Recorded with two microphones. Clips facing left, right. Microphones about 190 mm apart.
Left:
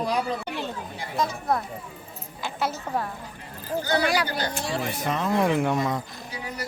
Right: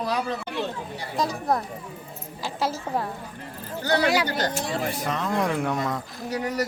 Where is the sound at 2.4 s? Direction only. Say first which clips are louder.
Right 1 dB; 30° right (ahead or behind).